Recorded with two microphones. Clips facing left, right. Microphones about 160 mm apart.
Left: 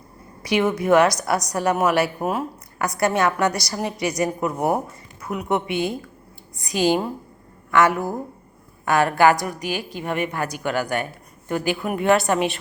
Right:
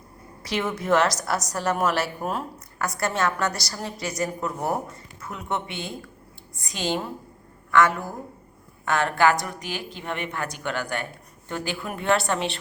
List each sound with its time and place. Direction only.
0.4 s a woman's voice: 15° left (ahead or behind)
8.8 s a woman's voice: 10° left (ahead or behind)